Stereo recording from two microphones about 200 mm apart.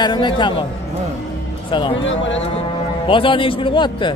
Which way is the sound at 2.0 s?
70° left (ahead or behind).